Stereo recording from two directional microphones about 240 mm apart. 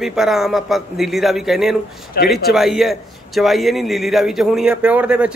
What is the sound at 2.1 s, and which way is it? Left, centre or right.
Speech, left.